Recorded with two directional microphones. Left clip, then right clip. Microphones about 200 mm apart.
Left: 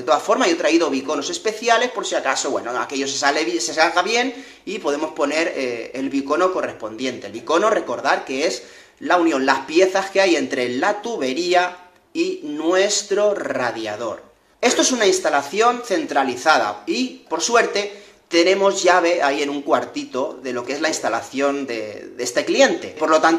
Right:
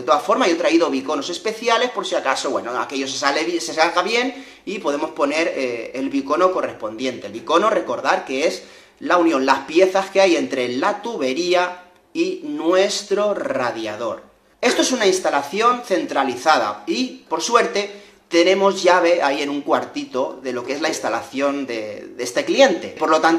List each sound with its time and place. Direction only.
0.0 s speech: 5° left (ahead or behind)